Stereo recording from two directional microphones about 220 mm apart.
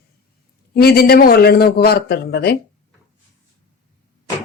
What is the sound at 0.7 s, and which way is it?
A man's voice, 45° left (ahead or behind).